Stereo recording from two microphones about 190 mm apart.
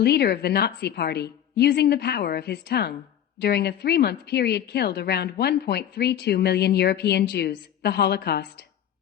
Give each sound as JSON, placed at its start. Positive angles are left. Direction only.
{"t": 0.0, "sound": "a woman's voice", "side_deg": 60}